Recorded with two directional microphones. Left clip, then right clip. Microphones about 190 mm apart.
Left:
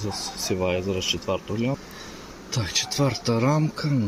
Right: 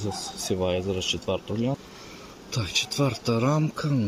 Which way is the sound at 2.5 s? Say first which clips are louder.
Left 1 dB; centre (ahead or behind).